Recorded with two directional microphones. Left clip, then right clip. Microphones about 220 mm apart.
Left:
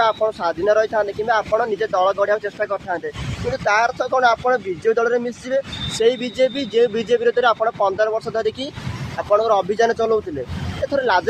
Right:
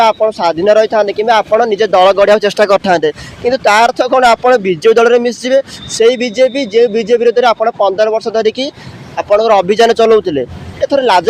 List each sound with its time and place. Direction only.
0.0 s speech: 35° right (ahead or behind)
6.0 s speech: 30° right (ahead or behind)